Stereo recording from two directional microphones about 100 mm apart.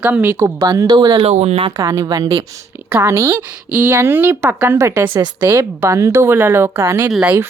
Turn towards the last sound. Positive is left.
turn(degrees=-20)  # may be behind; listen again after turning